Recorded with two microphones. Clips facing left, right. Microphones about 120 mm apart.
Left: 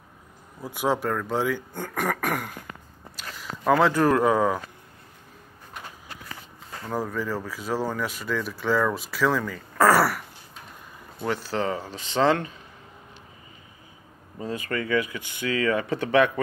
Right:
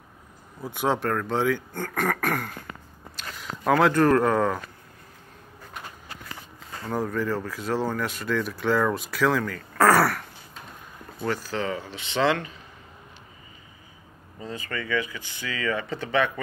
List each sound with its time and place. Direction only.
0.6 s speech: 5° left (ahead or behind)
6.9 s speech: 5° left (ahead or behind)
11.2 s speech: 30° left (ahead or behind)
14.4 s speech: 45° left (ahead or behind)